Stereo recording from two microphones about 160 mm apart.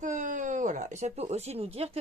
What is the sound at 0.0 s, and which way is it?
Speech, 50° right (ahead or behind).